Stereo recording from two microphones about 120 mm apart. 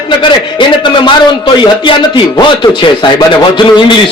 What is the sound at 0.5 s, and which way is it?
Speech, 40° left (ahead or behind).